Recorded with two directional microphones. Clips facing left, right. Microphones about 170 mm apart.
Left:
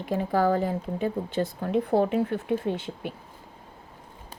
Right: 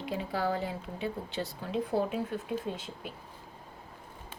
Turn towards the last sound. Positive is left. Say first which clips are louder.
# left 8 dB
turn(degrees=65)  # may be behind; listen again after turning